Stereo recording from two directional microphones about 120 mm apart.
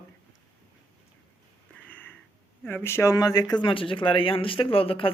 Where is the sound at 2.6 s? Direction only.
20° left (ahead or behind); by 3.6 s 35° left (ahead or behind).